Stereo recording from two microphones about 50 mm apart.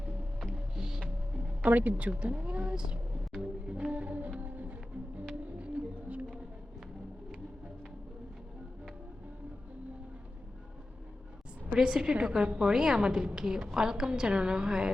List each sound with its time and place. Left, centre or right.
0.3 s music: centre
1.6 s speech: right
2.7 s speech: centre
3.4 s music: centre
5.5 s music: right
11.8 s a woman's voice: centre